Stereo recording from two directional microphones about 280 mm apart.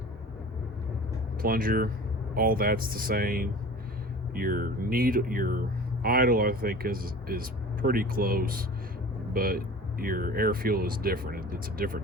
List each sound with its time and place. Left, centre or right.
1.4 s speech: right